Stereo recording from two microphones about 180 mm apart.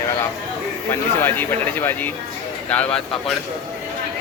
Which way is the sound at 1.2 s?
10° left (ahead or behind).